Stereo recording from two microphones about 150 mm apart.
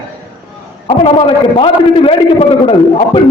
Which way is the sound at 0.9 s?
35° left (ahead or behind).